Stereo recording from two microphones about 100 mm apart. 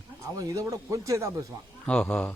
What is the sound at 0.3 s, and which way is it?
Speech, 35° right (ahead or behind).